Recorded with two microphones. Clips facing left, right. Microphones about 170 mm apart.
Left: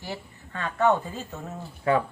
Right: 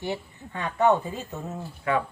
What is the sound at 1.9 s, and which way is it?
Speech, 35° left (ahead or behind).